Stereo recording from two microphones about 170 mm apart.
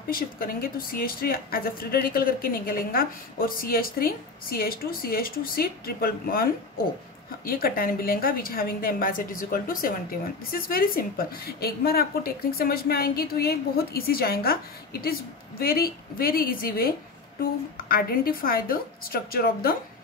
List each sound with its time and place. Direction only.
0.1 s a woman's voice: 60° left (ahead or behind)